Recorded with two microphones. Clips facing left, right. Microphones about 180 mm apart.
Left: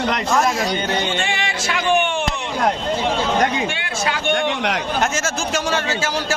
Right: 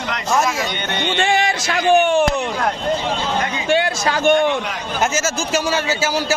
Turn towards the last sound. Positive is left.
turn(degrees=-5)  # may be behind; listen again after turning